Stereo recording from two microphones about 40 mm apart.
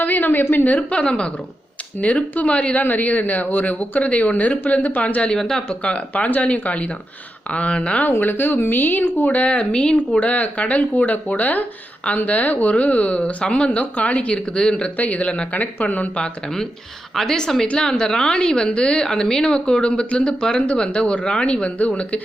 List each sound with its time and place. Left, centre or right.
0.0 s a sound: left
0.5 s speech: left
0.8 s speech: left
2.8 s speech: left
5.3 s speech: centre
5.6 s speech: left
8.2 s speech: left
9.2 s speech: left
9.5 s speech: left
10.2 s speech: left; by 14.8 s centre
14.8 s speech: left
16.2 s a woman's voice: centre; by 22.2 s left